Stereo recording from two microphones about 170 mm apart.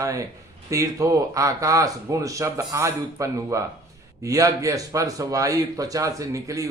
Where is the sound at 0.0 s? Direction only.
20° right (ahead or behind).